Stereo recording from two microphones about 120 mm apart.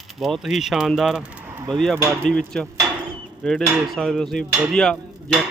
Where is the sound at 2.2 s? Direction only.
5° left (ahead or behind).